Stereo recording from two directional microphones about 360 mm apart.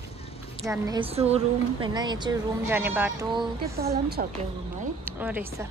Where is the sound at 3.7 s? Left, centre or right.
Right.